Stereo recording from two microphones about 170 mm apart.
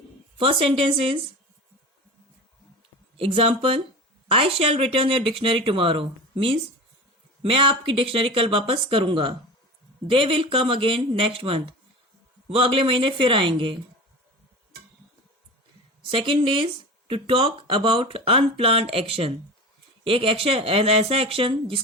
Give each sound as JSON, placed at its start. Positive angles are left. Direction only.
{"t": 0.3, "sound": "speech", "side_deg": -30}
{"t": 3.2, "sound": "speech", "side_deg": -35}
{"t": 16.1, "sound": "speech", "side_deg": -30}